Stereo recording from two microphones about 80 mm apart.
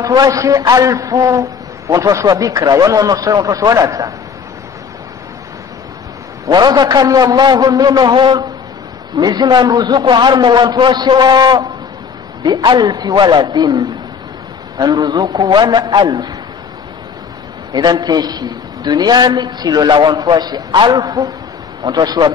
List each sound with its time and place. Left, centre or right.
0.0 s a man's voice: right
6.4 s a man's voice: right
9.1 s a man's voice: right
17.7 s a man's voice: right